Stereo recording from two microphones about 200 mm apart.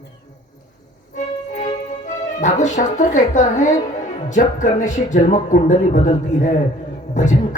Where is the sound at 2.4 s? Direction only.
35° left (ahead or behind).